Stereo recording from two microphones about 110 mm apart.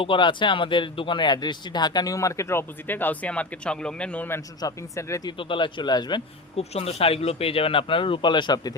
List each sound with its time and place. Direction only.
0.0 s speech: 50° left (ahead or behind); by 4.3 s 10° left (ahead or behind)
4.6 s speech: 25° left (ahead or behind)
5.4 s a man's voice: 50° left (ahead or behind)
6.6 s speech: 65° left (ahead or behind); by 8.7 s 40° left (ahead or behind)